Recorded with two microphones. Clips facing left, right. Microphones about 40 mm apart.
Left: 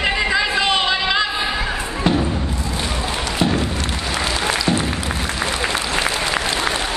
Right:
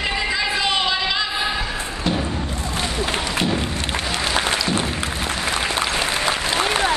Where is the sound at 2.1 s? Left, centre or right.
Centre.